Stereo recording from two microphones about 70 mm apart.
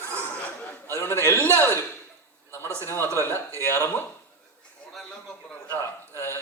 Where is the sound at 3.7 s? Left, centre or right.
Left.